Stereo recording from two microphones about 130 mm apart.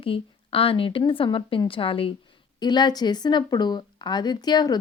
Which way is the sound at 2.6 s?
35° left (ahead or behind).